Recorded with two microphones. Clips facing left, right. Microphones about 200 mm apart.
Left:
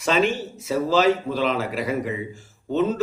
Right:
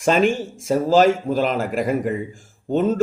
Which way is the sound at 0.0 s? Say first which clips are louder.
Right 4 dB; 50° right (ahead or behind).